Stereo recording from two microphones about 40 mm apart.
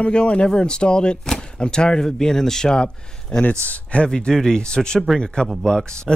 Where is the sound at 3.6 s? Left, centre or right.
Left.